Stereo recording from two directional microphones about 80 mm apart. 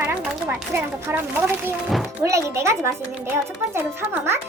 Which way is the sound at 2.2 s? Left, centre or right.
Right.